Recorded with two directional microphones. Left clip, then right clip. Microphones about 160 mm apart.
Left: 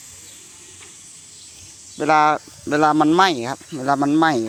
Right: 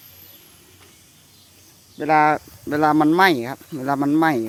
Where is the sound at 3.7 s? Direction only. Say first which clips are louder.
Left 2 dB; 25° right (ahead or behind).